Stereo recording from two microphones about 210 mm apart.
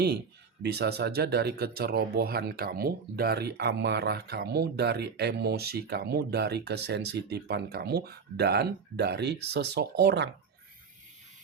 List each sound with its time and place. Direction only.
0.6 s speech: 50° right (ahead or behind)